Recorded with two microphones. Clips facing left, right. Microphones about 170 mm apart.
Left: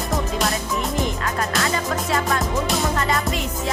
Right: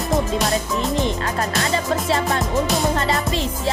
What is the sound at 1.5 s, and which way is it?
Music, 30° right (ahead or behind).